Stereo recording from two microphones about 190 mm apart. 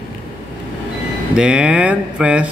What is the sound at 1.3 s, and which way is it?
Speech, 5° right (ahead or behind).